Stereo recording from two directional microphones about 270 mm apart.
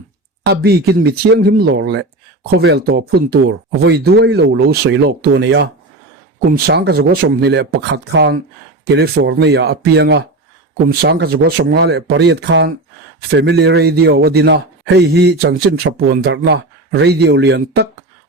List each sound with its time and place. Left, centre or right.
0.4 s a man's voice: right